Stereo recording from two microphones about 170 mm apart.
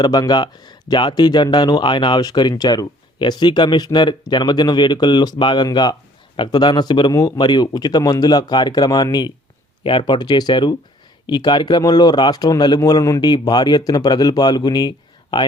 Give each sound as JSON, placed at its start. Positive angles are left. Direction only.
{"t": 0.0, "sound": "speech", "side_deg": 25}